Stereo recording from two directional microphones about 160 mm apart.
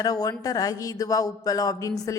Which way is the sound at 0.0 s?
25° left (ahead or behind).